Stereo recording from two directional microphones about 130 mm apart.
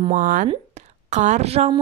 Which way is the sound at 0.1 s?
80° right.